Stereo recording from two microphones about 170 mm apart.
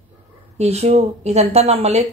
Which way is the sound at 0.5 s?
40° right (ahead or behind).